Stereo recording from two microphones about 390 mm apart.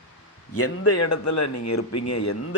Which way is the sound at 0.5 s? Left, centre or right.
Left.